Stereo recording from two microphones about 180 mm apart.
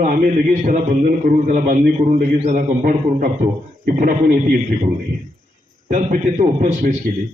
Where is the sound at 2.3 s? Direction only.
35° right (ahead or behind).